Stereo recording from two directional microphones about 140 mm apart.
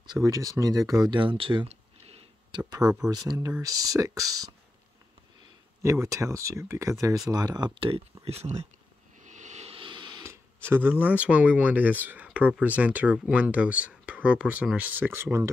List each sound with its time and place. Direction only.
0.0 s speech: 30° right (ahead or behind)
3.3 s speech: 25° right (ahead or behind)
5.8 s speech: 20° right (ahead or behind)
8.3 s speech: 50° right (ahead or behind)
9.2 s a sound: 60° right (ahead or behind); by 10.2 s 35° right (ahead or behind)
10.7 s speech: 15° right (ahead or behind)